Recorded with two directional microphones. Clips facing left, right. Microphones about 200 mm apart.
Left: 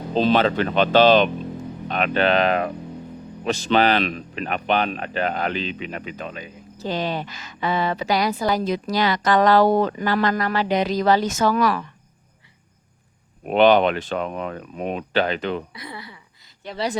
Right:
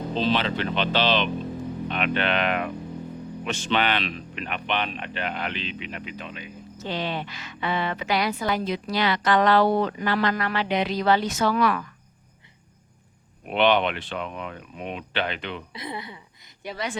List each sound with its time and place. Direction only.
0.1 s speech: 45° left (ahead or behind)
13.4 s speech: 40° left (ahead or behind)
15.7 s speech: 20° right (ahead or behind)
16.7 s speech: 35° left (ahead or behind)